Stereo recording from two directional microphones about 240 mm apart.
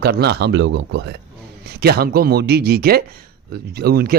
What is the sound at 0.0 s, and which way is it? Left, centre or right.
A man's voice, right.